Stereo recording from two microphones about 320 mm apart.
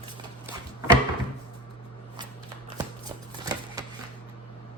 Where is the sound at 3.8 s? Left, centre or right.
Centre.